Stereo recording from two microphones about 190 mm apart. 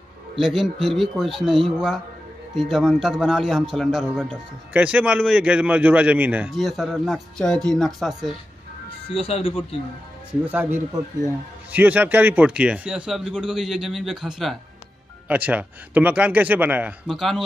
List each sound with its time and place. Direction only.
0.4 s speech: centre (ahead or behind)
9.0 s speech: 30° left (ahead or behind)
10.4 s a man's voice: 10° right (ahead or behind)